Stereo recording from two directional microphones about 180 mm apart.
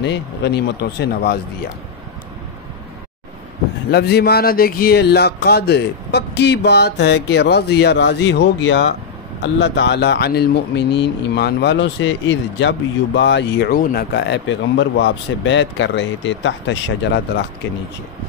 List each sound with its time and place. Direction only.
0.0 s speech: 70° left (ahead or behind)
3.9 s speech: 65° left (ahead or behind)